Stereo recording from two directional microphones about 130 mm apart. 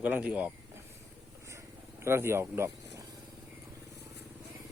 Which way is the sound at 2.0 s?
20° right (ahead or behind).